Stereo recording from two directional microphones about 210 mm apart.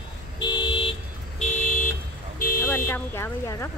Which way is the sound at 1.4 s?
35° left (ahead or behind).